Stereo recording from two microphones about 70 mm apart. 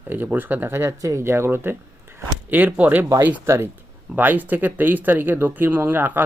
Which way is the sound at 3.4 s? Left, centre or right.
Right.